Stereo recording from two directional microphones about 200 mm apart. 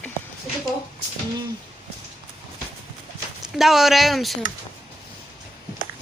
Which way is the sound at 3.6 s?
Centre (ahead or behind).